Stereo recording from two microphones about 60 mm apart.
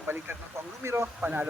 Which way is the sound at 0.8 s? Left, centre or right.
Right.